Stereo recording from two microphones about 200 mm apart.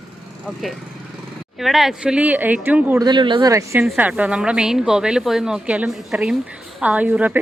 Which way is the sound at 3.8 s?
5° right (ahead or behind).